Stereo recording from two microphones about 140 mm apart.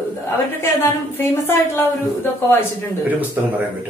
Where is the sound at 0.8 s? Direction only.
15° left (ahead or behind).